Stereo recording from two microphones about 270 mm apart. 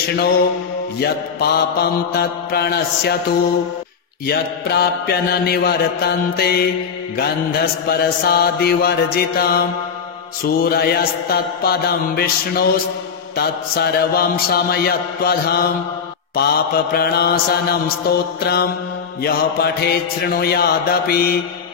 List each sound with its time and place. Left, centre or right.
0.9 s mantra: left
4.3 s mantra: left